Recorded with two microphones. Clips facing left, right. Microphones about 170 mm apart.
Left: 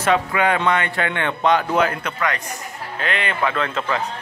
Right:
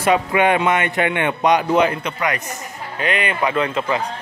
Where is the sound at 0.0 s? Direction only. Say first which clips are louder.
Right 2 dB; 15° right (ahead or behind).